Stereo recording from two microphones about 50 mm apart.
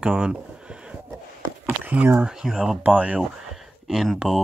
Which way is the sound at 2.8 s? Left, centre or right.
Right.